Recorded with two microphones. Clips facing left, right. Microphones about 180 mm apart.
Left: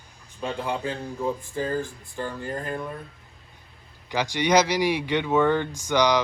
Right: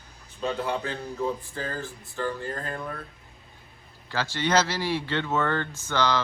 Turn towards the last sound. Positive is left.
turn(degrees=15)  # may be behind; listen again after turning